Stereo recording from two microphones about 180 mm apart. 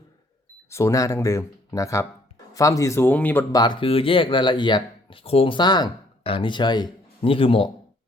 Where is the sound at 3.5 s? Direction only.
25° left (ahead or behind).